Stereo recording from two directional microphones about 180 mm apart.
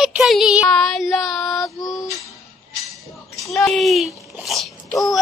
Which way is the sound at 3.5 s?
Centre (ahead or behind).